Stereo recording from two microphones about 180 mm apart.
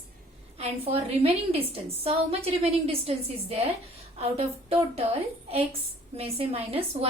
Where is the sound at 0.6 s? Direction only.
35° right (ahead or behind).